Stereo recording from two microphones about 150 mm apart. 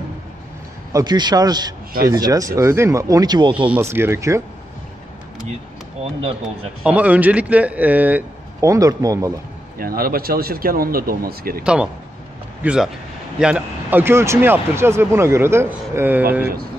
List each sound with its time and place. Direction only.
0.9 s speech: 30° right (ahead or behind)
3.6 s speech: 10° right (ahead or behind)
6.8 s speech: 10° right (ahead or behind)
9.8 s speech: 75° right (ahead or behind)
11.6 s speech: 5° right (ahead or behind)